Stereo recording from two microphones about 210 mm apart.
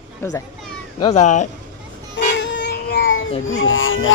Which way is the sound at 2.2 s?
55° left (ahead or behind).